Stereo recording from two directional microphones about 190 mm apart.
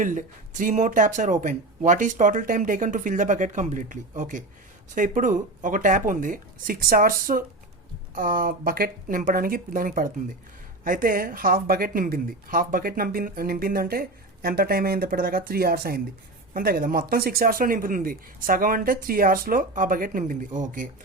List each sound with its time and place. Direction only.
0.0 s speech: 40° right (ahead or behind)